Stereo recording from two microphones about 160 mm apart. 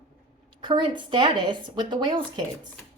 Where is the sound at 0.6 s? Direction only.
30° right (ahead or behind).